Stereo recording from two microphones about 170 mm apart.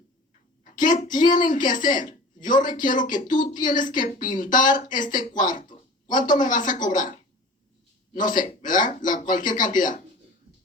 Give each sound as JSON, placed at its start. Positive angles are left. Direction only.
{"t": 0.6, "sound": "a woman's voice", "side_deg": 50}